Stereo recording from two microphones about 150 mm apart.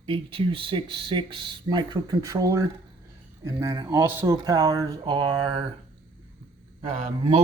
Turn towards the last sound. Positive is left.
turn(degrees=-45)  # may be behind; listen again after turning